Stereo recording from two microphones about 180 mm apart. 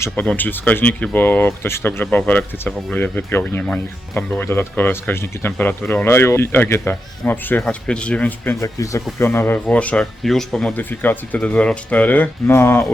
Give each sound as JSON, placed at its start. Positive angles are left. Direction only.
{"t": 0.0, "sound": "speech", "side_deg": 10}
{"t": 8.6, "sound": "speech", "side_deg": 15}